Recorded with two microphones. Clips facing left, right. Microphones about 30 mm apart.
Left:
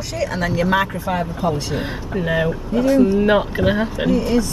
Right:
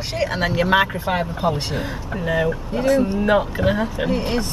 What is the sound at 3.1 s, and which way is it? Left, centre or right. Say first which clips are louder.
Speech: left 2 dB; centre.